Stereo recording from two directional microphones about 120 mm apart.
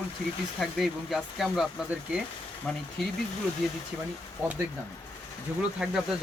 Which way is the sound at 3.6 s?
Centre (ahead or behind).